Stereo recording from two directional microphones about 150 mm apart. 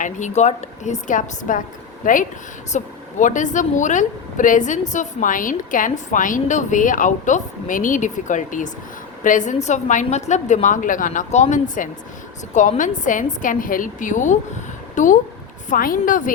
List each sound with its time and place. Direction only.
0.0 s a woman's voice: 50° left (ahead or behind)